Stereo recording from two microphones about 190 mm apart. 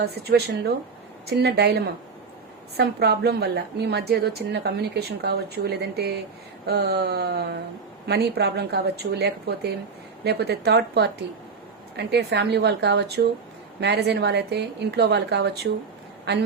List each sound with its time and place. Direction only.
0.0 s a woman's voice: 55° right (ahead or behind)